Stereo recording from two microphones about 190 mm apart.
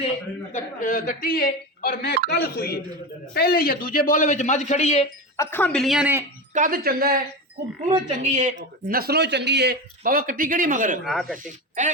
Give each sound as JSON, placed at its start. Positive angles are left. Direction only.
{"t": 0.5, "sound": "a man's voice", "side_deg": 40}
{"t": 5.4, "sound": "speech", "side_deg": 10}
{"t": 6.5, "sound": "speech", "side_deg": -45}
{"t": 8.0, "sound": "speech", "side_deg": -35}
{"t": 11.0, "sound": "speech", "side_deg": 0}